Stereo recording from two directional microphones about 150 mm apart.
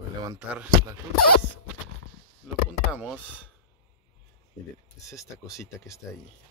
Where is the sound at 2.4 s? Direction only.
5° right (ahead or behind).